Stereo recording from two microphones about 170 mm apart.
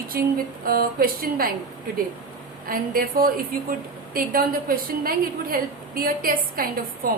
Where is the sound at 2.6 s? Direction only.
55° right (ahead or behind).